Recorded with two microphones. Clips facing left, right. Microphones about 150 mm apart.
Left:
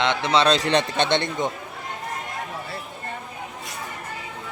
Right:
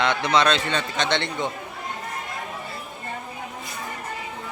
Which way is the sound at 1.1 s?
20° left (ahead or behind).